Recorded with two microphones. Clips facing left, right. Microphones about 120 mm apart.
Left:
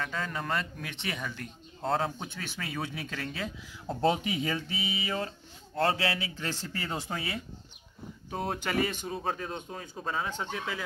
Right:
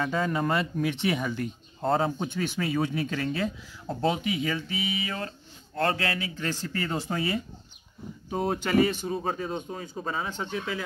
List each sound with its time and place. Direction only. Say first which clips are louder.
0.0 s speech: right 8 dB; 10° right (ahead or behind)
4.0 s speech: right 1 dB; 35° left (ahead or behind)
5.0 s speech: left 1 dB; 15° left (ahead or behind); by 10.8 s 5° right (ahead or behind)